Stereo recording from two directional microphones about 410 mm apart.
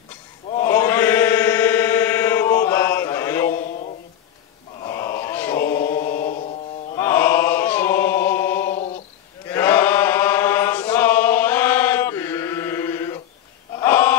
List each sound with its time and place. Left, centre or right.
0.5 s chant: centre
4.8 s chant: centre
6.1 s mantra: left
7.0 s chant: centre
13.7 s a sound: centre